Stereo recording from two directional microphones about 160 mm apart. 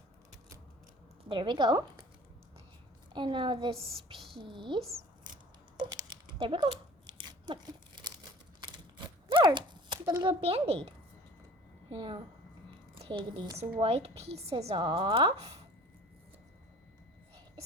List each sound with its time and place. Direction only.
1.2 s a woman's voice: 30° right (ahead or behind)
3.1 s a woman's voice: 30° right (ahead or behind)
5.7 s a sound: 25° right (ahead or behind)
10.2 s a woman's voice: 35° right (ahead or behind)
11.9 s a woman's voice: 30° right (ahead or behind)